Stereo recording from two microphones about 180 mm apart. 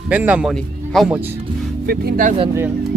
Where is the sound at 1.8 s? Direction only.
50° right (ahead or behind).